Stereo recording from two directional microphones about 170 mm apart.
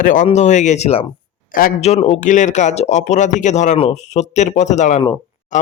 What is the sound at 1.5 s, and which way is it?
Speech, 55° left (ahead or behind).